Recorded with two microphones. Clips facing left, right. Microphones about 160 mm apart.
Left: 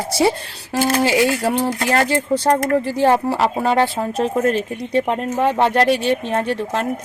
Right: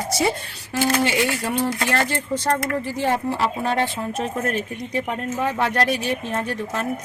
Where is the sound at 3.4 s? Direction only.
80° left.